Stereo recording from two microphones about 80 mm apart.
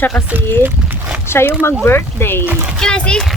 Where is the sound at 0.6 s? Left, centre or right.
Centre.